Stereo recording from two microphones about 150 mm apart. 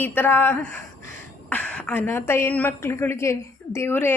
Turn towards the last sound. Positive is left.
turn(degrees=15)  # may be behind; listen again after turning